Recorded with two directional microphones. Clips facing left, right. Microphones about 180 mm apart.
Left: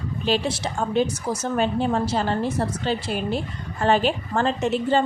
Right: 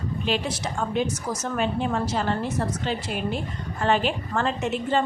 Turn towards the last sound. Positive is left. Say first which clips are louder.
# left 3 dB
turn(degrees=35)  # may be behind; listen again after turning